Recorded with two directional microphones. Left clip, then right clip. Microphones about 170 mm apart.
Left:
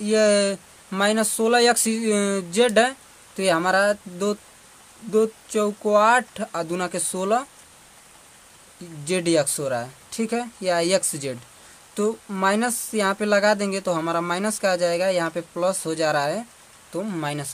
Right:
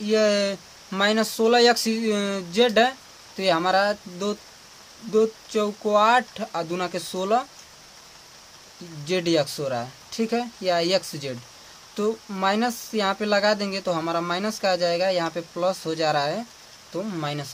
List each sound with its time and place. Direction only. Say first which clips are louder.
0.0 s speech: left 2 dB; 30° left (ahead or behind)
9.0 s speech: left 1 dB; 30° left (ahead or behind)